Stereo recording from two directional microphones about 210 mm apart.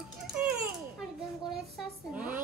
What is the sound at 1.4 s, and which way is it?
Speech, centre (ahead or behind).